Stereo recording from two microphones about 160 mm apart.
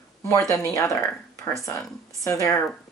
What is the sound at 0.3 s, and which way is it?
Speech, 20° left (ahead or behind).